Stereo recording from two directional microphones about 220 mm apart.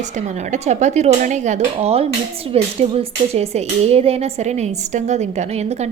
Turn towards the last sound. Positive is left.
turn(degrees=-30)  # may be behind; listen again after turning